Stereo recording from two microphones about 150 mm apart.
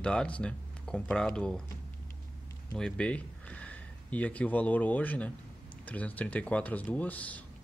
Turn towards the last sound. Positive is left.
turn(degrees=10)  # may be behind; listen again after turning